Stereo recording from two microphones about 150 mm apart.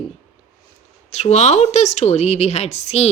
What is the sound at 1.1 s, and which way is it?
A woman's voice, 50° left (ahead or behind).